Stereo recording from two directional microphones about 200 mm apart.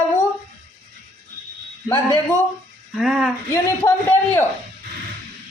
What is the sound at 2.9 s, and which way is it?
Speech, 5° right (ahead or behind).